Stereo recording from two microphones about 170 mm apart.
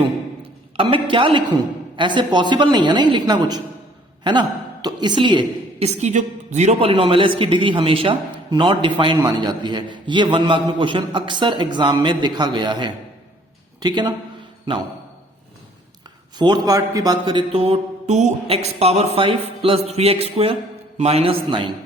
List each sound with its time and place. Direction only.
0.8 s a man's voice: 30° right (ahead or behind)
6.0 s a man's voice: 45° right (ahead or behind); by 14.1 s 25° right (ahead or behind)
16.4 s speech: 25° right (ahead or behind)